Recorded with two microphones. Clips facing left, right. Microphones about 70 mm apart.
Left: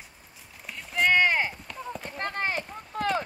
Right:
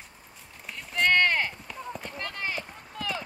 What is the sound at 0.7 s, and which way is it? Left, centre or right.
Horse, centre.